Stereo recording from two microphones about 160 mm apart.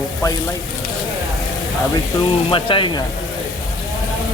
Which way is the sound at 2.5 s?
35° left (ahead or behind).